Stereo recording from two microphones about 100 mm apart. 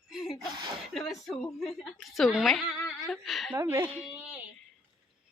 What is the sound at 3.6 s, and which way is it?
Speech, 30° right (ahead or behind).